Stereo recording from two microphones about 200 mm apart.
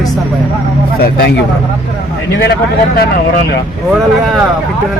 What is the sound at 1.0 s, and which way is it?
Speech, 50° left (ahead or behind).